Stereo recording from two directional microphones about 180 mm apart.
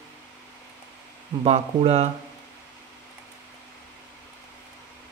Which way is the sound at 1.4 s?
35° right (ahead or behind).